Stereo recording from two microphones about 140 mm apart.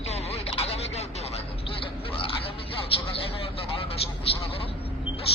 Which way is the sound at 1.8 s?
40° left (ahead or behind).